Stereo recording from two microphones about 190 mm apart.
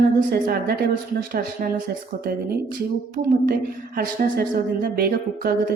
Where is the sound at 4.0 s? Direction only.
50° right (ahead or behind).